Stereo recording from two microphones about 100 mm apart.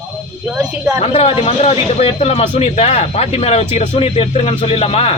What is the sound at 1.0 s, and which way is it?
Speech, 75° left (ahead or behind).